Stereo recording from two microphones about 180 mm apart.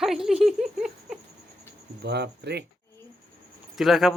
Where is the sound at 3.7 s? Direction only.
Centre (ahead or behind).